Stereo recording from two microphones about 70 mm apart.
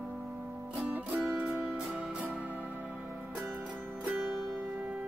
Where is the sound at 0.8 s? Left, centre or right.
Centre.